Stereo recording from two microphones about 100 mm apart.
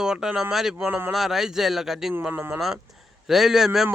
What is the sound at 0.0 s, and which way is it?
Speech, 5° right (ahead or behind).